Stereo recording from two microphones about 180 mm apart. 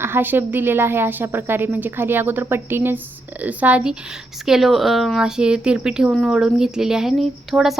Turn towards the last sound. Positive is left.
turn(degrees=0)  # may be behind; listen again after turning